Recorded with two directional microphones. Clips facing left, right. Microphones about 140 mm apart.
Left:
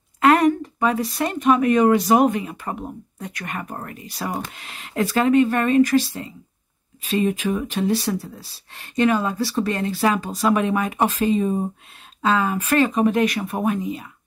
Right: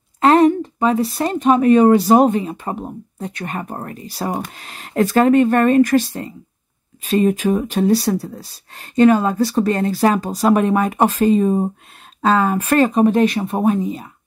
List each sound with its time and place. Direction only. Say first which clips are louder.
0.2 s speech: right 4 dB; 30° right (ahead or behind)